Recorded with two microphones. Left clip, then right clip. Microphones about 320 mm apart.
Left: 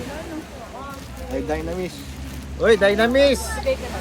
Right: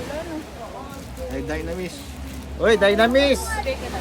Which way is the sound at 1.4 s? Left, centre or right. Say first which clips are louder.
Left 3 dB; centre.